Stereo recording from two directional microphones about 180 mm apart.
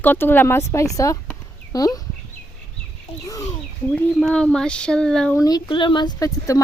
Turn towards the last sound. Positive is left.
turn(degrees=20)  # may be behind; listen again after turning